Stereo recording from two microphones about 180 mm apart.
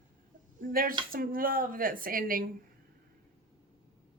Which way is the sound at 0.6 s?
50° right (ahead or behind).